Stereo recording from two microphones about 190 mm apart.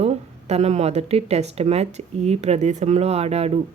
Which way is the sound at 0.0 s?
35° right (ahead or behind).